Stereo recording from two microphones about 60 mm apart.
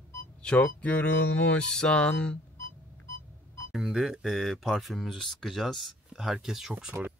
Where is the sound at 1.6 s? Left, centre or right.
Centre.